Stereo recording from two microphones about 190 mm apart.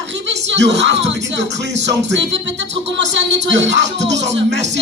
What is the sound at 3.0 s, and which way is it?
Speech, 70° right (ahead or behind).